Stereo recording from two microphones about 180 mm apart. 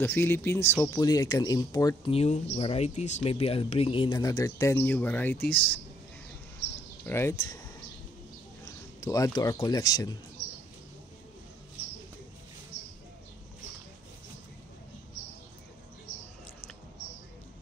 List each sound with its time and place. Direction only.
0.0 s speech: 10° left (ahead or behind)
2.5 s speech: 35° left (ahead or behind); by 5.8 s 5° left (ahead or behind)
7.1 s speech: 15° left (ahead or behind)
9.0 s speech: 20° left (ahead or behind)